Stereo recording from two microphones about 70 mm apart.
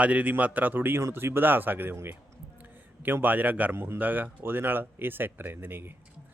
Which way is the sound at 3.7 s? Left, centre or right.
Right.